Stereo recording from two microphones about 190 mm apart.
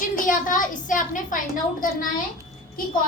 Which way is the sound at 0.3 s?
45° left (ahead or behind).